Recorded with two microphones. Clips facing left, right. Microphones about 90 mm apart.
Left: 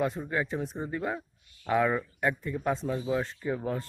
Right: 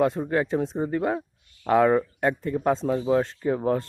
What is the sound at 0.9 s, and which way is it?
A man's voice, 50° right (ahead or behind).